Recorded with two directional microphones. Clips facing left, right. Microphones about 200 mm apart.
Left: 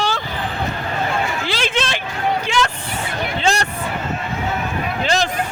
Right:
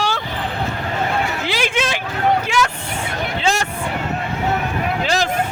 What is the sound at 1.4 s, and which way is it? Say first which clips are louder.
Hubbub: right 1 dB; 15° right (ahead or behind).